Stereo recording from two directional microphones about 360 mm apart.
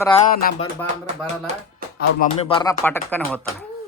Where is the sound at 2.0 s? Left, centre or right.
Centre.